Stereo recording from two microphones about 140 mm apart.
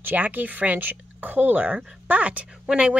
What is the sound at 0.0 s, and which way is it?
Speech, 10° right (ahead or behind).